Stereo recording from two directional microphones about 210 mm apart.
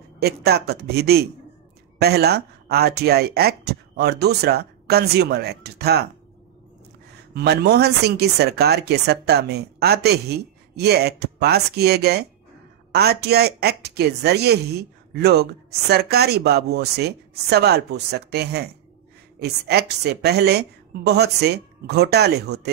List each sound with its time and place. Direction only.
0.2 s speech: 50° right (ahead or behind)
7.3 s speech: 50° right (ahead or behind)